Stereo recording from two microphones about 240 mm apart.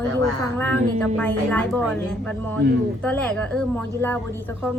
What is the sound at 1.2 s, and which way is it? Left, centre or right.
Speech, centre.